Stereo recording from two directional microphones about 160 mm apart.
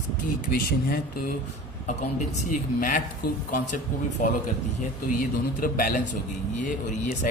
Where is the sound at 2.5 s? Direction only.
55° left (ahead or behind).